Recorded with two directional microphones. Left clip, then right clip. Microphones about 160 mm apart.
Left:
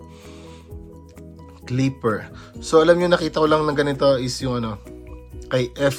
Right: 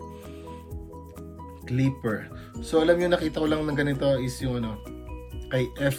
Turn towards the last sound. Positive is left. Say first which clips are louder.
# left 6 dB
turn(degrees=35)  # may be behind; listen again after turning